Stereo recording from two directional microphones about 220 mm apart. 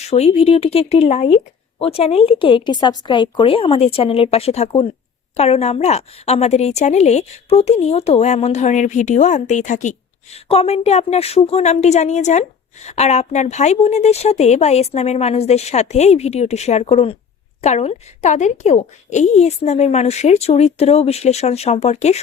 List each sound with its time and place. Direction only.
0.1 s a woman's voice: 30° left (ahead or behind)